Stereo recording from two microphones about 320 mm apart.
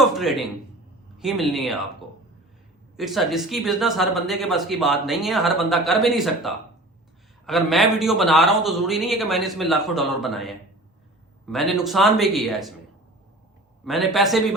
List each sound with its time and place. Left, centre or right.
0.0 s a sound: centre
1.2 s speech: centre
2.9 s speech: centre
13.8 s speech: centre